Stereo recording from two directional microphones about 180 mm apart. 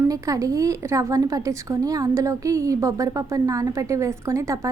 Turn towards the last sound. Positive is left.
turn(degrees=-15)  # may be behind; listen again after turning